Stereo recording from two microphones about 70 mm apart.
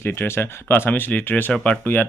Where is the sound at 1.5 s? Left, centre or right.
Centre.